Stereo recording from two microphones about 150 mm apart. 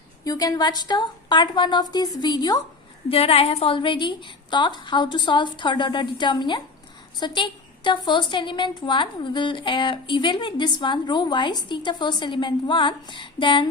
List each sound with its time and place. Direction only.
0.3 s a woman's voice: 25° left (ahead or behind)
3.1 s a woman's voice: 40° left (ahead or behind)